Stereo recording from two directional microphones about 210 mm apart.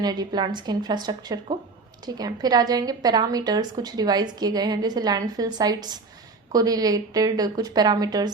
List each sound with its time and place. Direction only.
0.0 s a woman's voice: 20° right (ahead or behind)